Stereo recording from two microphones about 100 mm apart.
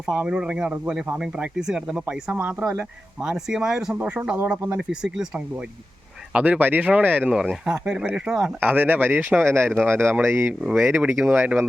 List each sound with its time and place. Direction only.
0.0 s speech: 15° right (ahead or behind)
2.3 s speech: 15° right (ahead or behind)
8.6 s speech: 15° right (ahead or behind)
10.6 s speech: 10° right (ahead or behind)
10.8 s speech: 20° right (ahead or behind)